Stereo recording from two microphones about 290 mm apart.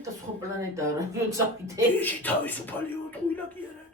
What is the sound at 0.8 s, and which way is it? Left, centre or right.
Speech, centre.